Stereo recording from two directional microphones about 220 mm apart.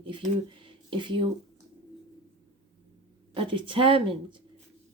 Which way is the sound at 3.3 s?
25° right (ahead or behind).